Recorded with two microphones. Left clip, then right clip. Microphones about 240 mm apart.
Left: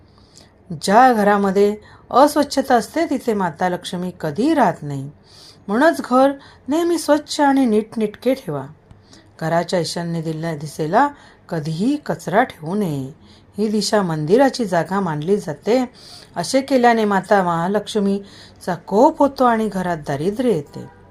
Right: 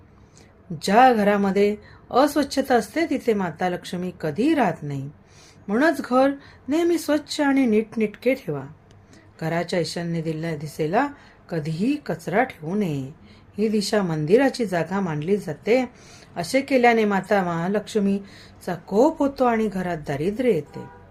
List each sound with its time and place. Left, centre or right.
0.8 s a woman's voice: centre